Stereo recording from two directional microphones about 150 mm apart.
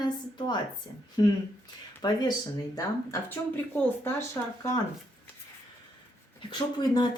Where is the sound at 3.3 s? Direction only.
15° left (ahead or behind).